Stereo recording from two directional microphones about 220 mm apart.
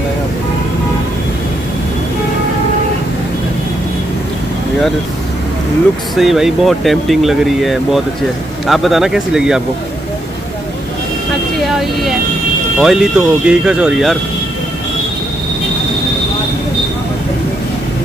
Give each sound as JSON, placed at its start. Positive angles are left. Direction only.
{"t": 6.1, "sound": "speech", "side_deg": 0}
{"t": 11.6, "sound": "speech", "side_deg": 0}